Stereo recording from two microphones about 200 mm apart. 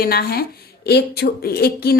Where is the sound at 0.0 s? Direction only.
50° left (ahead or behind).